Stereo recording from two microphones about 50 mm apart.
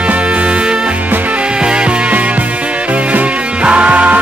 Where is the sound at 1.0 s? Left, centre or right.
Right.